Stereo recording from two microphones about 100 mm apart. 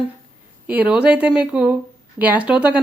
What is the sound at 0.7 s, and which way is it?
A woman's voice, 15° right (ahead or behind).